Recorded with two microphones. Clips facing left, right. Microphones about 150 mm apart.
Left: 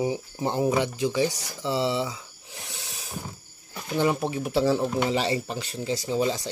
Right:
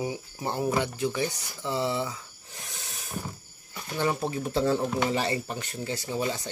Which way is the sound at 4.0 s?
15° left (ahead or behind).